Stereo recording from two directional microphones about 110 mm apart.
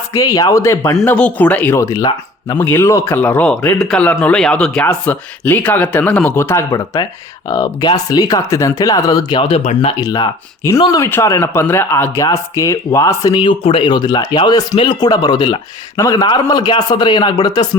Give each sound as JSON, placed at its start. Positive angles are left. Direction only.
{"t": 0.1, "sound": "speech", "side_deg": 30}
{"t": 1.0, "sound": "speech", "side_deg": 15}
{"t": 1.7, "sound": "speech", "side_deg": 30}
{"t": 2.6, "sound": "speech", "side_deg": 20}
{"t": 9.4, "sound": "speech", "side_deg": 60}
{"t": 10.0, "sound": "speech", "side_deg": 35}
{"t": 11.0, "sound": "speech", "side_deg": 25}
{"t": 13.3, "sound": "speech", "side_deg": 50}
{"t": 13.9, "sound": "speech", "side_deg": 40}
{"t": 16.0, "sound": "speech", "side_deg": 30}
{"t": 16.2, "sound": "speech", "side_deg": 40}